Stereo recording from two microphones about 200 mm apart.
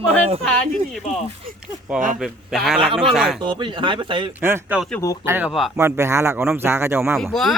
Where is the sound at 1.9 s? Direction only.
40° right (ahead or behind).